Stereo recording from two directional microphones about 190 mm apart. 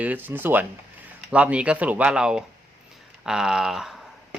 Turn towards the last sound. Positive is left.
turn(degrees=0)  # may be behind; listen again after turning